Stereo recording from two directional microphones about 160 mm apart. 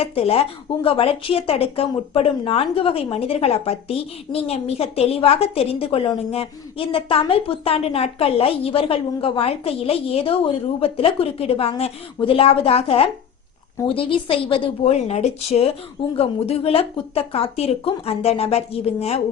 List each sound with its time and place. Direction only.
0.0 s a woman's voice: 40° left (ahead or behind)